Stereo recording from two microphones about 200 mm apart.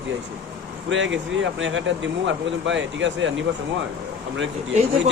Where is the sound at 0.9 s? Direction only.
65° right (ahead or behind).